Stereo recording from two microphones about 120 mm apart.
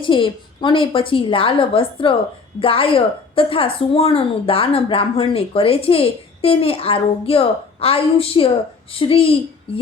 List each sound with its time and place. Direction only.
0.0 s a woman's voice: 45° left (ahead or behind)